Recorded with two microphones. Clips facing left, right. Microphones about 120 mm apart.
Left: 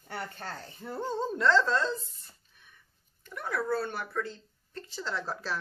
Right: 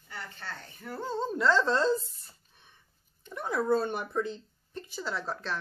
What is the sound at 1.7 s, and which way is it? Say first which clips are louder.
Speech: right 3 dB; 30° right (ahead or behind).